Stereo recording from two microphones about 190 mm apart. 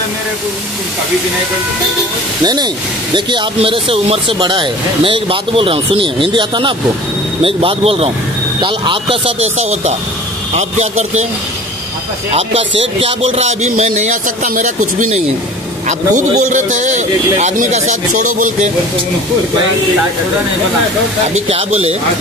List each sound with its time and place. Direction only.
2.4 s a man's voice: 20° right (ahead or behind)
12.4 s a man's voice: 30° right (ahead or behind)
21.5 s a man's voice: 35° right (ahead or behind)